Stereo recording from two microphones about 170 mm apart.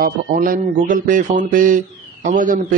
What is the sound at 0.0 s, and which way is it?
Speech, 55° right (ahead or behind).